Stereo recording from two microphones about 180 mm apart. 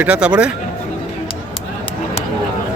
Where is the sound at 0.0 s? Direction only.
5° right (ahead or behind).